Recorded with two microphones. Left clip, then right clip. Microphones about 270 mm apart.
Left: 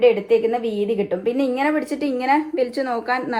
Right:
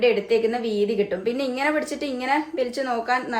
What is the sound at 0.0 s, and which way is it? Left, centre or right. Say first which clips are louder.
A woman's voice: left 4 dB; left.